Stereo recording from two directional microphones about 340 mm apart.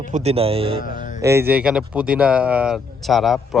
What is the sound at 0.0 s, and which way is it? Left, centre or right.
Speech, centre.